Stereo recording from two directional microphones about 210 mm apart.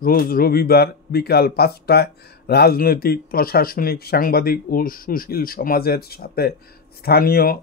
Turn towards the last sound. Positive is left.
turn(degrees=45)  # may be behind; listen again after turning